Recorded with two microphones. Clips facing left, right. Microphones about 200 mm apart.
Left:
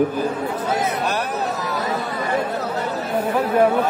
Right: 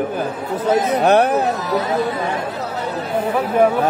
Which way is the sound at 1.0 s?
60° right (ahead or behind).